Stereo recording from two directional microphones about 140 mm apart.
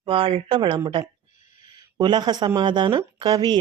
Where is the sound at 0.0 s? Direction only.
40° right (ahead or behind).